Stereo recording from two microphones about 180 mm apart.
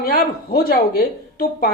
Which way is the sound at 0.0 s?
55° left (ahead or behind).